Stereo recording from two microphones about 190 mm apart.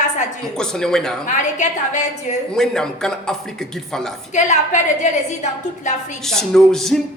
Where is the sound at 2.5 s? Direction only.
5° left (ahead or behind).